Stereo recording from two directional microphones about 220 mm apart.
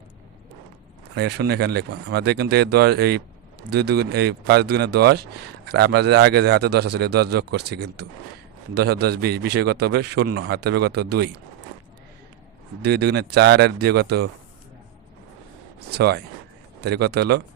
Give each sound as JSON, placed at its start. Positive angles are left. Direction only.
{"t": 1.1, "sound": "a man's voice", "side_deg": -50}
{"t": 12.8, "sound": "a man's voice", "side_deg": -50}
{"t": 15.9, "sound": "a man's voice", "side_deg": -50}